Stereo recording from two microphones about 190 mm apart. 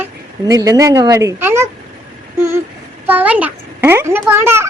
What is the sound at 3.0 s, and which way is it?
A child's voice, 10° right (ahead or behind).